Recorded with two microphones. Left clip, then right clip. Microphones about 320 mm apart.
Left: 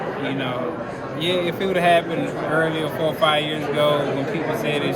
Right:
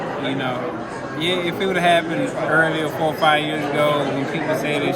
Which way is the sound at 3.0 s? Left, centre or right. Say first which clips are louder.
Right 2 dB; centre.